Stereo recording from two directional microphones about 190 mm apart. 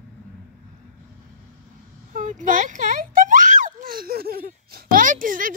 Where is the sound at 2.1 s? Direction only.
40° right (ahead or behind).